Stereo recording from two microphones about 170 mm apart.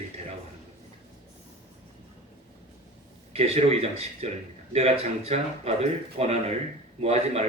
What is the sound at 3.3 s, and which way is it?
Speech, 35° right (ahead or behind).